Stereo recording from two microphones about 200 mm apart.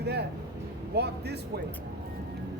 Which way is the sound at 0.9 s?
55° right (ahead or behind).